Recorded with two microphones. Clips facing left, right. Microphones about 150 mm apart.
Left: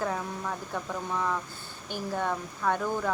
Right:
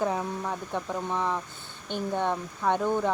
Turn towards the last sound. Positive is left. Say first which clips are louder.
# right 3 dB
turn(degrees=-20)  # may be behind; listen again after turning